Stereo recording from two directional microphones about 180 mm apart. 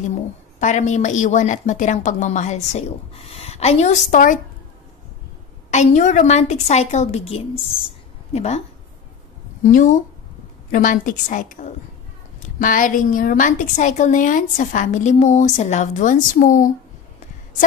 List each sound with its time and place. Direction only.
0.1 s a woman's voice: 40° left (ahead or behind)
5.7 s a woman's voice: 40° left (ahead or behind)
7.8 s a sound: 35° left (ahead or behind)
9.6 s a woman's voice: 45° left (ahead or behind)